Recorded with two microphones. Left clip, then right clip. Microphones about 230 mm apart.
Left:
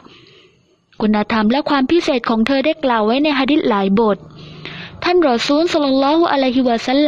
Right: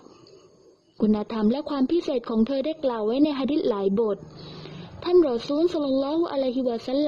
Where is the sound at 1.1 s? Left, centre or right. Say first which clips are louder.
Left 12 dB; left.